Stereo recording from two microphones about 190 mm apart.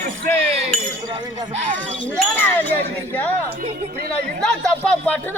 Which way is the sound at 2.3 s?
10° left (ahead or behind).